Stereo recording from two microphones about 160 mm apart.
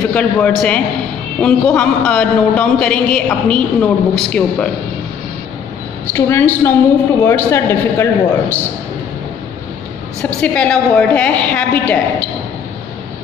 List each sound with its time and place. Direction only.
0.1 s a man's voice: 10° left (ahead or behind)
6.1 s a man's voice: 15° left (ahead or behind)
10.4 s a man's voice: 10° left (ahead or behind)